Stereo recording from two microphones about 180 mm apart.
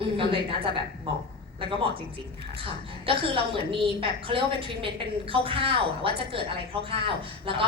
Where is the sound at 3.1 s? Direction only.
30° right (ahead or behind).